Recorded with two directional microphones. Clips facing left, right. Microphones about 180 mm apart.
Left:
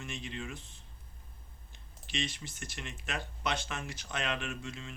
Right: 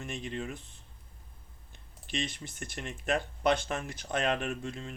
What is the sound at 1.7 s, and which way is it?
Speech, 50° right (ahead or behind).